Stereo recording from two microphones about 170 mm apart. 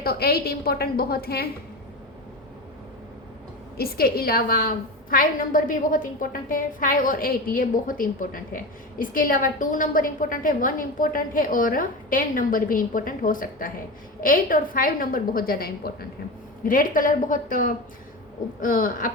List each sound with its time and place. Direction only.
0.0 s a woman's voice: 65° left (ahead or behind)
3.8 s a woman's voice: 65° left (ahead or behind)
16.6 s a woman's voice: 55° left (ahead or behind)